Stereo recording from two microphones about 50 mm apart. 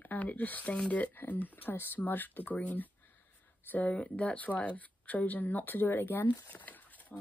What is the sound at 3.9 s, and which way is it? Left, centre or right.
Speech, left.